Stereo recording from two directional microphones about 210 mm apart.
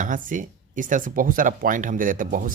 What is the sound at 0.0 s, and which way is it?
Speech, 40° right (ahead or behind).